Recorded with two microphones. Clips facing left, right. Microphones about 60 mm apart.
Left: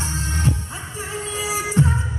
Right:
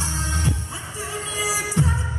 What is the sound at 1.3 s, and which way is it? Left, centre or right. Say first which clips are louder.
Music: left 2 dB; left.